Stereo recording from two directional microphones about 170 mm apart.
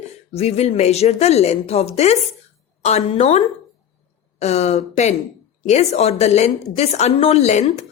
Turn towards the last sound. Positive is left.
turn(degrees=40)  # may be behind; listen again after turning